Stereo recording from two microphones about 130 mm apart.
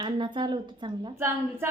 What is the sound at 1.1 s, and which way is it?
Speech, 20° right (ahead or behind).